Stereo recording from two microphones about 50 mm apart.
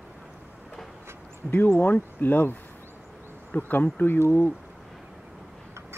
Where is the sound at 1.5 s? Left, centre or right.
Left.